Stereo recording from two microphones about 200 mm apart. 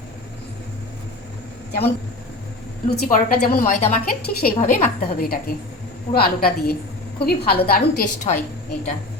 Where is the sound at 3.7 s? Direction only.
35° left (ahead or behind).